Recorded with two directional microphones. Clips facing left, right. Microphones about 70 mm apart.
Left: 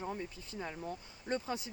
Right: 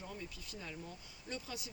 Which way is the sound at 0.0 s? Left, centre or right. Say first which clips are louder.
Left 7 dB; left.